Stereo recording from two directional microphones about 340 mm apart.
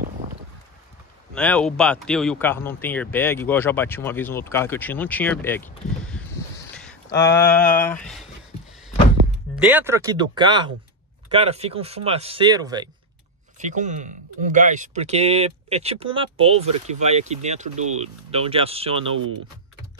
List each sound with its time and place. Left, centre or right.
1.3 s speech: centre
9.6 s speech: centre